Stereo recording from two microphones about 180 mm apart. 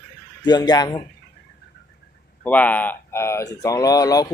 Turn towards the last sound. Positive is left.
turn(degrees=20)  # may be behind; listen again after turning